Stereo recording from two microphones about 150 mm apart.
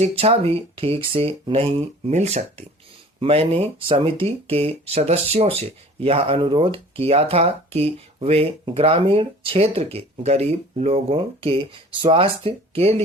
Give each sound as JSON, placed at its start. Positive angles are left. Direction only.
{"t": 0.0, "sound": "speech", "side_deg": -40}